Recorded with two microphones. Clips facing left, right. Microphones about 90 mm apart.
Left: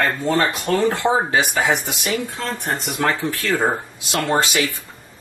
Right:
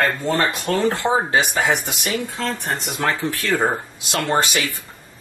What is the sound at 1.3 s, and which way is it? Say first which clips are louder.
Speech: even; 20° left (ahead or behind).